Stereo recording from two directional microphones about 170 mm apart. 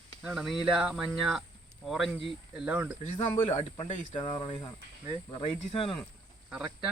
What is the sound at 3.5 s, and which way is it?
Speech, 40° left (ahead or behind).